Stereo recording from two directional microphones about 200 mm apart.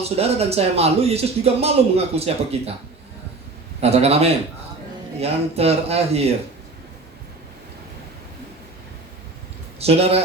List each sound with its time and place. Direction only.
0.0 s speech: 30° right (ahead or behind)
3.8 s speech: 30° right (ahead or behind)
9.8 s speech: 30° right (ahead or behind)